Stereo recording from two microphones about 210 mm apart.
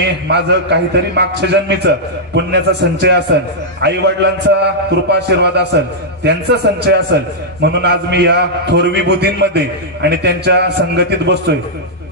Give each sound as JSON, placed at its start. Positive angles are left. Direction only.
{"t": 0.3, "sound": "a man's voice", "side_deg": -55}